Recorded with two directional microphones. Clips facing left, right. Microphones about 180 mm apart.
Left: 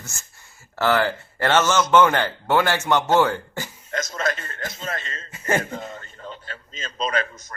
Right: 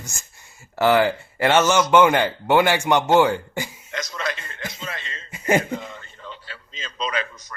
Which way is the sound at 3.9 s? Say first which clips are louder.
Left 3 dB; 45° left (ahead or behind).